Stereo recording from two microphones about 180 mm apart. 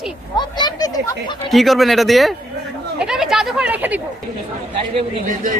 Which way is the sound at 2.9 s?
5° right (ahead or behind).